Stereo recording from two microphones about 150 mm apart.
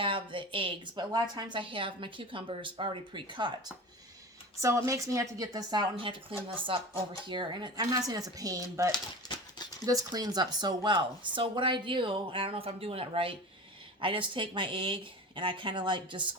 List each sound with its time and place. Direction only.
0.0 s speech: 35° right (ahead or behind)
4.6 s speech: 20° right (ahead or behind)
9.8 s speech: 25° right (ahead or behind)